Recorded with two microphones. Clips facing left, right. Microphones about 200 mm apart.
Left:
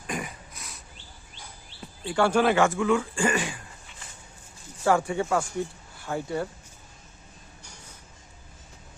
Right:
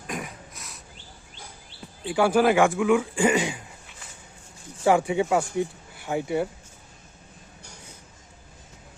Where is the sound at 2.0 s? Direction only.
5° right (ahead or behind).